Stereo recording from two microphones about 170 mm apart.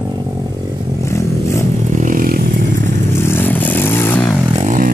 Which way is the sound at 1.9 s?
50° right (ahead or behind).